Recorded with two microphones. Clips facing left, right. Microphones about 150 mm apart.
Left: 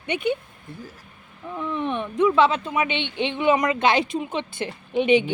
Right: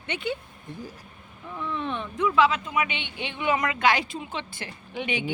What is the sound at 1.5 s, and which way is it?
Speech, 15° left (ahead or behind).